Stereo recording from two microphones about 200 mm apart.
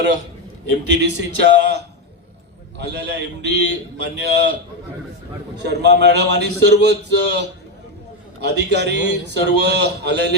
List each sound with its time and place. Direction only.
0.9 s a man's voice: 60° right (ahead or behind)
5.6 s a man's voice: 60° right (ahead or behind)